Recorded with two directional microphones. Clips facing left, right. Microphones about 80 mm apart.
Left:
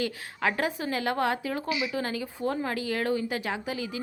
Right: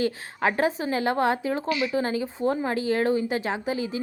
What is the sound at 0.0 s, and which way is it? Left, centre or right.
Speech, right.